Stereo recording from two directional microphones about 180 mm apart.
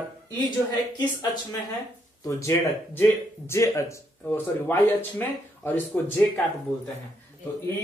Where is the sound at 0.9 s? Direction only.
25° left (ahead or behind).